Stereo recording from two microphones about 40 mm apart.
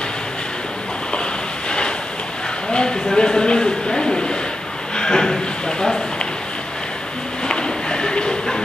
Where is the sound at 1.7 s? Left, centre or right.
Left.